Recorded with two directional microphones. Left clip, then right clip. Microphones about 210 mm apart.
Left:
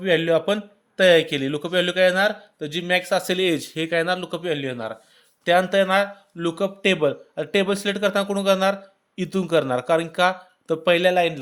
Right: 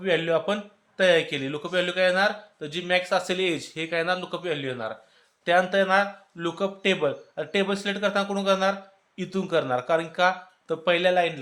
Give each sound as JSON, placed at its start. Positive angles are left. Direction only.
{"t": 0.0, "sound": "speech", "side_deg": 45}